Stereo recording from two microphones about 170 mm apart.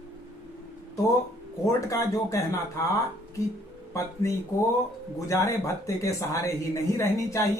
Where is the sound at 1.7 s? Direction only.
20° left (ahead or behind).